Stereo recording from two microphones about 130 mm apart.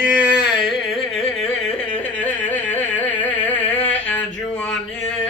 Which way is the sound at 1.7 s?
10° left (ahead or behind).